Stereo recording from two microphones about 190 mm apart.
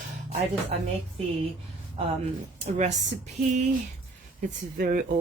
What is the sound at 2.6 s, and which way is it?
Speech, 35° right (ahead or behind).